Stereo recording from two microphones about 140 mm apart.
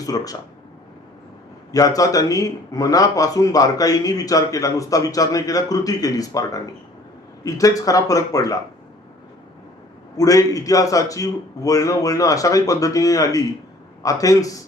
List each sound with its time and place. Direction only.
0.0 s a man's voice: 25° left (ahead or behind)
1.7 s a man's voice: 25° left (ahead or behind)
10.2 s a man's voice: 25° left (ahead or behind)